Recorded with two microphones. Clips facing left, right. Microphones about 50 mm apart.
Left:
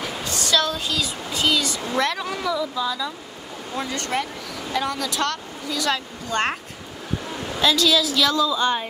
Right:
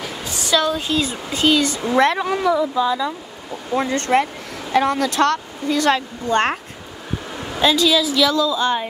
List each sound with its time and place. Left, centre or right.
0.2 s a sound: centre
0.8 s speech: right
7.5 s a woman's voice: centre